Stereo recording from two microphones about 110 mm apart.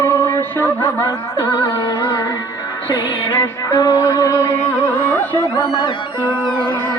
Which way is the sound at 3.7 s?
35° left (ahead or behind).